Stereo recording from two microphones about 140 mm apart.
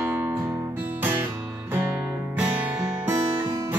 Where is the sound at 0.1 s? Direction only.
15° right (ahead or behind).